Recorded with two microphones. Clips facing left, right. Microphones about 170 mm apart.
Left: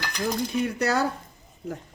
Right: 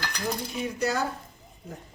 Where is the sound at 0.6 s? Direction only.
65° left (ahead or behind).